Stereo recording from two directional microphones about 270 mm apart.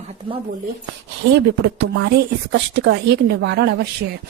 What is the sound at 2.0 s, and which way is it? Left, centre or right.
A woman's voice, right.